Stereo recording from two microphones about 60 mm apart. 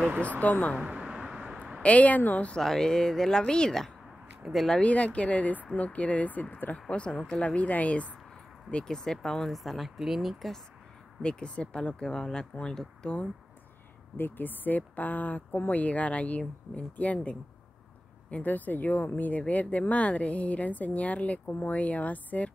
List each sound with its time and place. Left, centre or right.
0.2 s speech: left
0.8 s a sound: centre
1.8 s speech: left
2.5 s speech: centre
4.5 s speech: centre
4.7 s speech: left; by 10.6 s centre
11.2 s speech: centre
14.1 s speech: left